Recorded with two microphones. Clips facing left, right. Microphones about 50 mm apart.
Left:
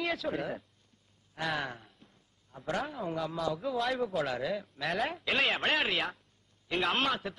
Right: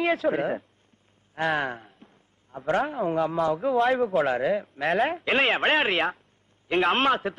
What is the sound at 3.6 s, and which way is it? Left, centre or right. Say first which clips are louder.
Speech: right 11 dB; right.